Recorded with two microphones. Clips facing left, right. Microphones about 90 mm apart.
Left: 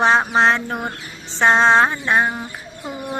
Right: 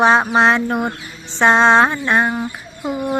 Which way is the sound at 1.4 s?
Centre (ahead or behind).